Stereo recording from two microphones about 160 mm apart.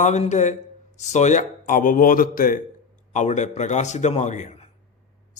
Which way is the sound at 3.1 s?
50° left (ahead or behind).